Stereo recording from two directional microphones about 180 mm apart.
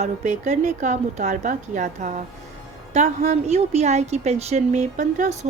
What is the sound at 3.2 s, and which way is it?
A woman's voice, 35° right (ahead or behind).